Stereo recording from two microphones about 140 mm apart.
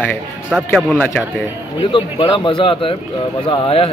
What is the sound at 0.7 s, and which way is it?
Speech, 5° left (ahead or behind).